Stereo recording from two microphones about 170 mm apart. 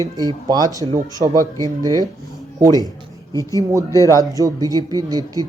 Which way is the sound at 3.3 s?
20° left (ahead or behind).